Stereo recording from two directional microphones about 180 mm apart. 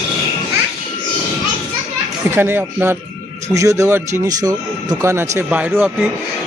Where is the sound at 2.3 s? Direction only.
10° right (ahead or behind).